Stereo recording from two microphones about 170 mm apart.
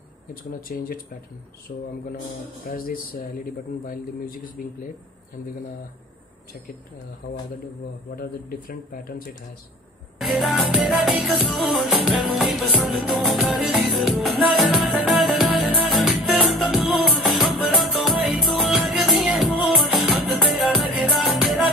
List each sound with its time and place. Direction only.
0.3 s speech: 55° left (ahead or behind)
8.2 s speech: 60° left (ahead or behind)
10.1 s music: 5° right (ahead or behind)